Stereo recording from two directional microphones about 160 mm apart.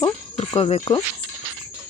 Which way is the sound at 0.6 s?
40° left (ahead or behind).